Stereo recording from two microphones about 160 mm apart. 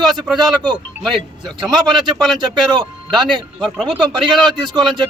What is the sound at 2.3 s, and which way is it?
A man's voice, 30° right (ahead or behind).